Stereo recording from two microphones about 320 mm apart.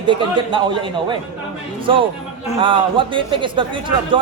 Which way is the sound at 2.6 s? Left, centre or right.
Centre.